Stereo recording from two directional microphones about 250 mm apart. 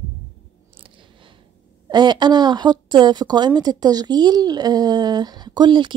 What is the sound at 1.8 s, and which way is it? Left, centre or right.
A woman's voice, centre.